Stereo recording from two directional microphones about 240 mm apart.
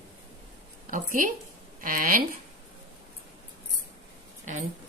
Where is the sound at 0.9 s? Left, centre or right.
Right.